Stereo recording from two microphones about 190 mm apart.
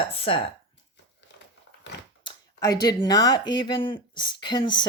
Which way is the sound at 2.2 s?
20° left (ahead or behind).